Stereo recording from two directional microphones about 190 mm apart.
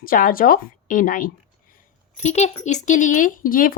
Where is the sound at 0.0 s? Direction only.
50° left (ahead or behind).